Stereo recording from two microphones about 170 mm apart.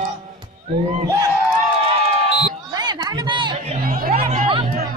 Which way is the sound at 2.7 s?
25° right (ahead or behind).